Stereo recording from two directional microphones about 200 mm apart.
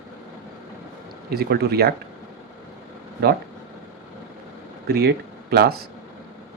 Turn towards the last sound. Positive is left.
turn(degrees=-50)  # may be behind; listen again after turning